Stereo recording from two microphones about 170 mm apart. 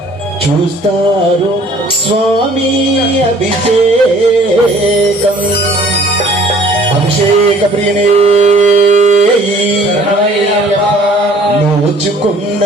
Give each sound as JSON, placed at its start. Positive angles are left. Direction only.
{"t": 8.1, "sound": "carnatic music", "side_deg": -35}